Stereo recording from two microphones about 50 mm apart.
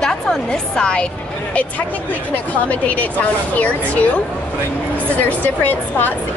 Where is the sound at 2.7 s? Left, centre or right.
Left.